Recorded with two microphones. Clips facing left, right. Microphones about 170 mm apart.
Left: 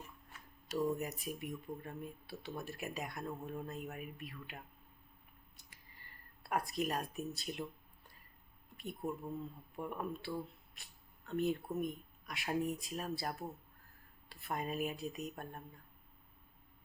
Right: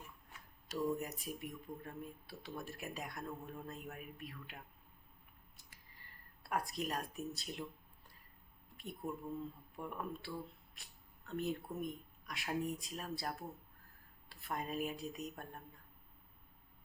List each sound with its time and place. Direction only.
0.9 s speech: centre (ahead or behind)
6.4 s speech: centre (ahead or behind)
9.0 s speech: 20° left (ahead or behind)
9.7 s speech: centre (ahead or behind)